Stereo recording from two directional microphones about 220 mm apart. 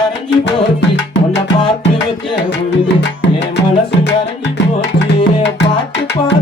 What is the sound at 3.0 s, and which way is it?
Music, 55° left (ahead or behind).